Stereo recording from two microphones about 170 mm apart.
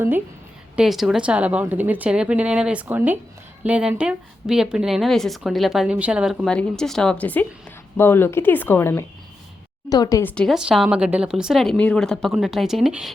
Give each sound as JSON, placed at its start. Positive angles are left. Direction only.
{"t": 0.8, "sound": "a woman's voice", "side_deg": 0}
{"t": 10.3, "sound": "a woman's voice", "side_deg": 0}